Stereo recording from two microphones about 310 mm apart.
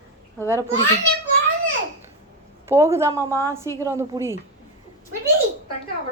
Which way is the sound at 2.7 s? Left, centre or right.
Centre.